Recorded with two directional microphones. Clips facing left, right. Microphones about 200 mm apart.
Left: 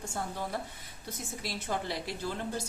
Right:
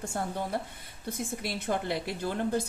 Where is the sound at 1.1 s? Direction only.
55° right (ahead or behind).